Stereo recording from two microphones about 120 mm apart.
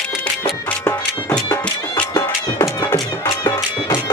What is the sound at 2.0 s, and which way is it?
Music, 35° left (ahead or behind).